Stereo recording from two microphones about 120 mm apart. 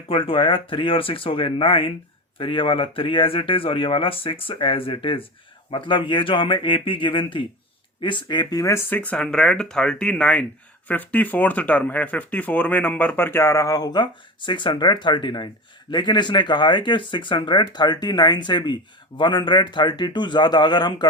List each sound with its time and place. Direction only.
0.1 s speech: 50° left (ahead or behind)